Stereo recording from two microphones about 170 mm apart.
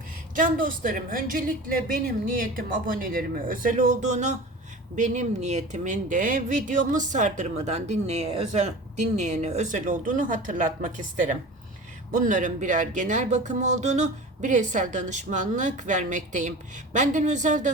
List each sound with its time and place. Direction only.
0.3 s a woman's voice: 50° right (ahead or behind)